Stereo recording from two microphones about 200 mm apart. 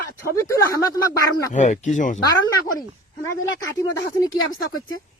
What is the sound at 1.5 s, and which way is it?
Speech, 35° left (ahead or behind).